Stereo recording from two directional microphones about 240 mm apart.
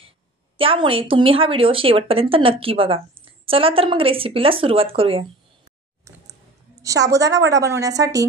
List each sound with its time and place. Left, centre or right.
0.6 s speech: right
6.8 s a woman's voice: centre